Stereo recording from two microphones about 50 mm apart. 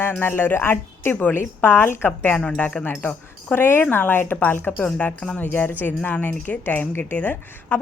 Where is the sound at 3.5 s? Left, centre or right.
Left.